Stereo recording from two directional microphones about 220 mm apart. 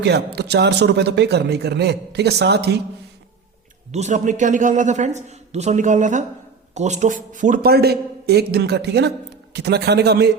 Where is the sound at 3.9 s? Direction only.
30° right (ahead or behind).